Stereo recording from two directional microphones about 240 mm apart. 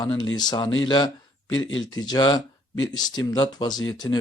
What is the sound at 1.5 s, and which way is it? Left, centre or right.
Speech, left.